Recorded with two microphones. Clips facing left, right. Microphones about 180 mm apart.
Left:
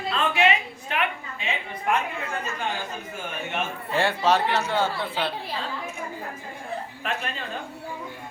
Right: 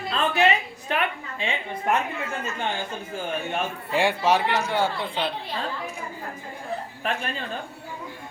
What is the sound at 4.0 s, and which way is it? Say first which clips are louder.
Speech: right 1 dB; 15° right (ahead or behind).